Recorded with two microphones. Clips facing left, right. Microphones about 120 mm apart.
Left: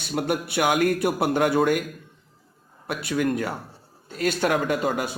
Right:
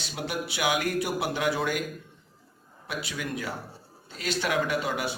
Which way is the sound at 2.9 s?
55° left (ahead or behind).